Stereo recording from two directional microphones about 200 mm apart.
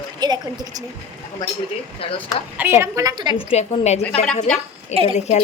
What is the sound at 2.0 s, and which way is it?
Speech, 30° left (ahead or behind).